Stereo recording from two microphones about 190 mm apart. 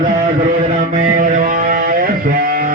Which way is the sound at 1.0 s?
45° right (ahead or behind).